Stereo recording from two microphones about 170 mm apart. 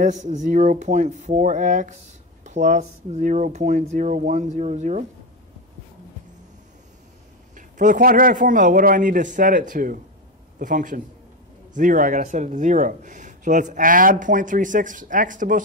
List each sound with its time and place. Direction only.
0.0 s speech: 45° right (ahead or behind)
7.5 s speech: 50° right (ahead or behind)